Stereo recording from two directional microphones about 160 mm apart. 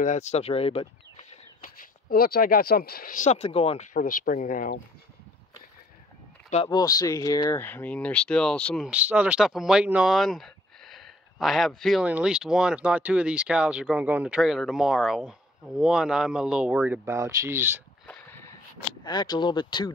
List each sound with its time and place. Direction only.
0.0 s speech: 45° left (ahead or behind)
1.6 s speech: 60° left (ahead or behind)
3.3 s speech: 40° left (ahead or behind); by 4.7 s 60° left (ahead or behind)
6.7 s speech: 25° left (ahead or behind); by 8.8 s 5° left (ahead or behind)
8.8 s speech: 10° right (ahead or behind)
19.0 s speech: 25° left (ahead or behind)